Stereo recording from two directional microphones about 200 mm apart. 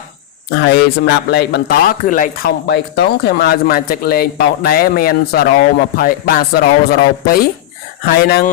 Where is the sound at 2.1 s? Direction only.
45° left (ahead or behind).